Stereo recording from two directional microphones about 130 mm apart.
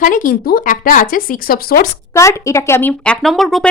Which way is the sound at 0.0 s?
90° left.